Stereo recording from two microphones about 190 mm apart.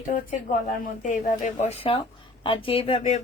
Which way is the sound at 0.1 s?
40° left (ahead or behind).